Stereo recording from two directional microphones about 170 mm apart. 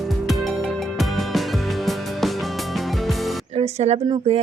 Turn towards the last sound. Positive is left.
turn(degrees=-35)  # may be behind; listen again after turning